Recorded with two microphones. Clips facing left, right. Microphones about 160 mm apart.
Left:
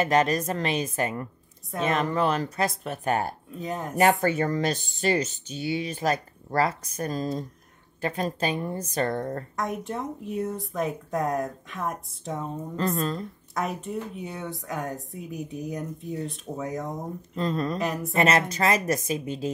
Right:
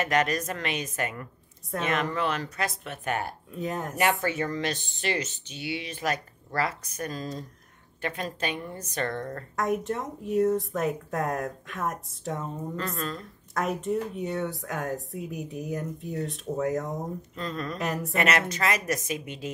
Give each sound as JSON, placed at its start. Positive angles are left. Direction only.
{"t": 0.0, "sound": "speech", "side_deg": 30}
{"t": 3.5, "sound": "speech", "side_deg": 0}
{"t": 4.0, "sound": "speech", "side_deg": 40}
{"t": 9.6, "sound": "speech", "side_deg": 0}
{"t": 12.7, "sound": "speech", "side_deg": 30}
{"t": 13.6, "sound": "speech", "side_deg": 0}
{"t": 17.4, "sound": "speech", "side_deg": 30}
{"t": 17.7, "sound": "speech", "side_deg": 0}
{"t": 18.1, "sound": "speech", "side_deg": 30}